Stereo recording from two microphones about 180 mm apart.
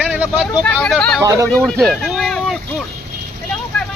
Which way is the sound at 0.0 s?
5° right (ahead or behind).